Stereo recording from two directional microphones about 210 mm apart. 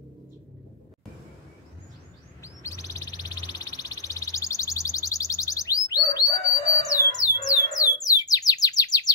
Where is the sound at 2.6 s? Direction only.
15° left (ahead or behind).